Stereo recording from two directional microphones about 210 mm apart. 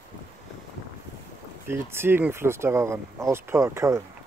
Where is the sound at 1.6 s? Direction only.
10° right (ahead or behind).